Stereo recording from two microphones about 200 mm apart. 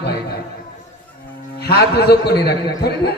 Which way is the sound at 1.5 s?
50° left (ahead or behind).